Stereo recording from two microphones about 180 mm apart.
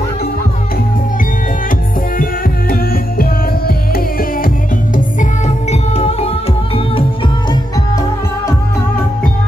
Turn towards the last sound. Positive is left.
turn(degrees=20)  # may be behind; listen again after turning